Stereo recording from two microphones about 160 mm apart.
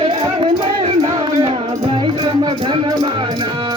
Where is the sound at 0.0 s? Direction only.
40° right (ahead or behind).